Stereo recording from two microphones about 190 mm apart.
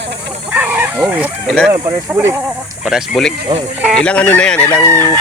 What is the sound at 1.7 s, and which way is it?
Speech, 15° right (ahead or behind).